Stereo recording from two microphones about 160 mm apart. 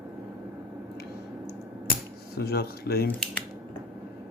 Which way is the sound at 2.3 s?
80° left.